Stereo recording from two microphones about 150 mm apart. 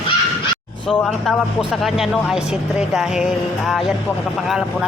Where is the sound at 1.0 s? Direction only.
Centre (ahead or behind).